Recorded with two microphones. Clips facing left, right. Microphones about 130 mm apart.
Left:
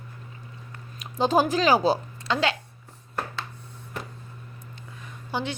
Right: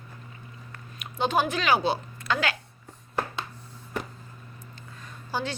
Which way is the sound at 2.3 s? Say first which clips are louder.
Left 3 dB; 25° left (ahead or behind).